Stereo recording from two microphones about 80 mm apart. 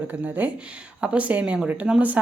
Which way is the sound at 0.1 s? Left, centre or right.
Right.